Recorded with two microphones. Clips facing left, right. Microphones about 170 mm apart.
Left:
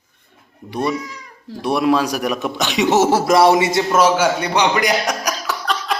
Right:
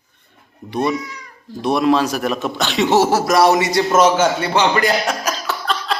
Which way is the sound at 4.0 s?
10° left (ahead or behind).